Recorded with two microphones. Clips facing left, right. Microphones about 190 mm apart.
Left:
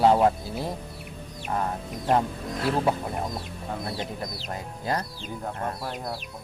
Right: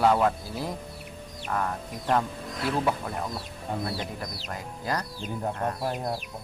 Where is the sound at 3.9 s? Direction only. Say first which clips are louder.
Left 1 dB; 25° left (ahead or behind).